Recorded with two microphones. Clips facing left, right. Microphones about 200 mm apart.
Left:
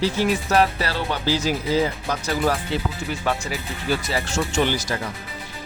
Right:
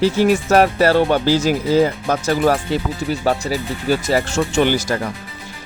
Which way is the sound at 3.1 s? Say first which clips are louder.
Right 8 dB; 35° right (ahead or behind).